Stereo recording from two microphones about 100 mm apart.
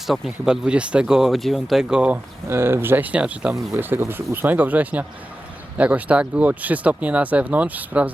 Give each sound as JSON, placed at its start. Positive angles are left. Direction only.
{"t": 0.1, "sound": "speech", "side_deg": -5}
{"t": 2.5, "sound": "speech", "side_deg": -25}